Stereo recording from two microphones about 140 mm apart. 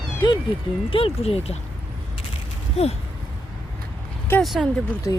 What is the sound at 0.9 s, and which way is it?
Speech, 45° left (ahead or behind).